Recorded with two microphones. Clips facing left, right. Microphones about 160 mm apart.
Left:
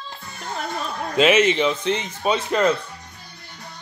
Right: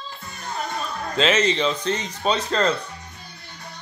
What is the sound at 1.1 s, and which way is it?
Speech, 10° left (ahead or behind).